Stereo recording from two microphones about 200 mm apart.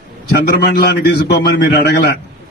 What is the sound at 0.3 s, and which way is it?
A man's voice, 50° left (ahead or behind).